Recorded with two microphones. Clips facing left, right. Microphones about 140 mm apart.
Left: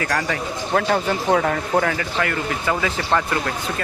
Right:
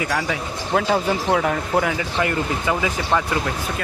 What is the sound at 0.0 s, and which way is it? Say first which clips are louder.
Speech: even; 5° right (ahead or behind).